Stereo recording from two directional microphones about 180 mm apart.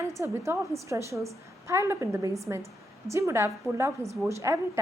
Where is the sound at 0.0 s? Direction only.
15° right (ahead or behind).